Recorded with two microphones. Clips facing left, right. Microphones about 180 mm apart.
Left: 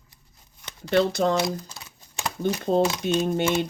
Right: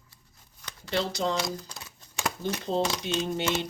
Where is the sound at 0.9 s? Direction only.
55° left (ahead or behind).